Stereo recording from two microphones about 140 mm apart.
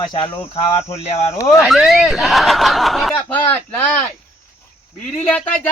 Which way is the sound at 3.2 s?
10° left (ahead or behind).